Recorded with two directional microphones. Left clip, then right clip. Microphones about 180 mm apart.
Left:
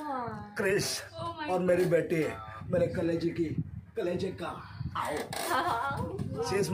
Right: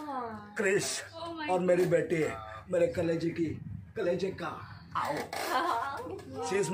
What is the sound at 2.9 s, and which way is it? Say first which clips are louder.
Speech: even; 60° right (ahead or behind).